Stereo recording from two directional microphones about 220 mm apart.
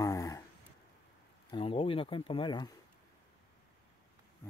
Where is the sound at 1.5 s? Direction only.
25° left (ahead or behind).